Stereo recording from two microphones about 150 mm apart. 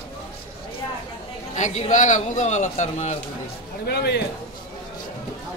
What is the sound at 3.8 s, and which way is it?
Speech, 90° left.